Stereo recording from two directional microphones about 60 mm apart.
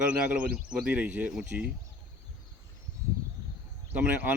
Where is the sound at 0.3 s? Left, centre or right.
Right.